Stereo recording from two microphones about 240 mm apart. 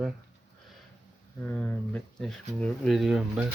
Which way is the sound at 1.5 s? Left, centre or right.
Centre.